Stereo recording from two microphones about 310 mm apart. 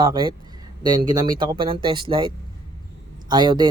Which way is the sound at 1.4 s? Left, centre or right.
Centre.